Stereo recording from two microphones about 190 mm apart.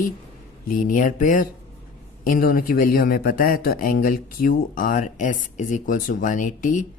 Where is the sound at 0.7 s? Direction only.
45° left (ahead or behind).